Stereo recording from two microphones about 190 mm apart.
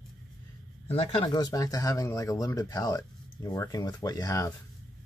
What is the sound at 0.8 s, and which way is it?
Speech, 30° left (ahead or behind).